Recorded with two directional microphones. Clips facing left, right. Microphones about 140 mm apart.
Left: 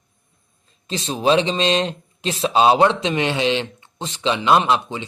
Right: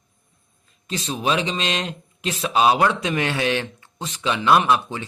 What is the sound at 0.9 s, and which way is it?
A man's voice, 30° left (ahead or behind).